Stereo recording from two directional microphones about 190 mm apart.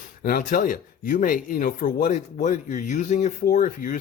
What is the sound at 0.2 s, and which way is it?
Speech, 50° left (ahead or behind).